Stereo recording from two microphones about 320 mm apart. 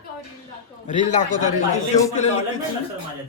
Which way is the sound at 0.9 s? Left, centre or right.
Left.